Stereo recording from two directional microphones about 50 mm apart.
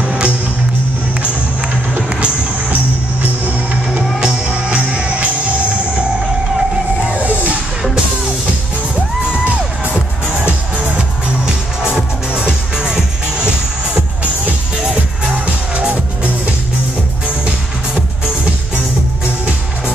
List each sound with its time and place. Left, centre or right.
0.0 s music: right
2.0 s music: right
2.7 s music: right
4.2 s music: right
7.1 s a sound: right
11.8 s music: centre
15.3 s music: right